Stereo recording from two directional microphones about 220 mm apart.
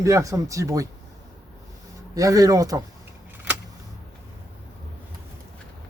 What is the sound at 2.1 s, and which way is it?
Speech, 15° right (ahead or behind).